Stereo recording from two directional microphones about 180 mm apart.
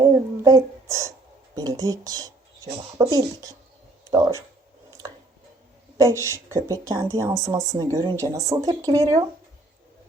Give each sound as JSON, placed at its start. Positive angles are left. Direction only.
{"t": 0.0, "sound": "a sound", "side_deg": -20}
{"t": 1.5, "sound": "a woman's voice", "side_deg": -20}
{"t": 6.0, "sound": "a woman's voice", "side_deg": -15}